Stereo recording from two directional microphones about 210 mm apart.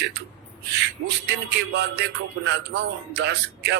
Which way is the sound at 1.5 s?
55° right (ahead or behind).